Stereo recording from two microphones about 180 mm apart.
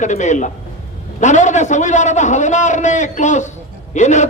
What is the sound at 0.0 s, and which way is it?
A man's voice, 40° left (ahead or behind).